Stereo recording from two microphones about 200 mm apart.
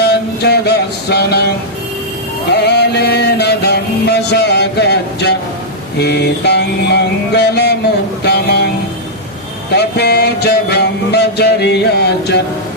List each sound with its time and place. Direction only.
0.0 s music: 55° left (ahead or behind)
2.5 s music: 55° left (ahead or behind)
8.2 s a sound: 55° left (ahead or behind)
9.7 s music: 55° left (ahead or behind)